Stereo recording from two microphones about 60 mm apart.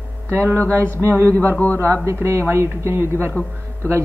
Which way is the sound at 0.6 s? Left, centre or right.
Left.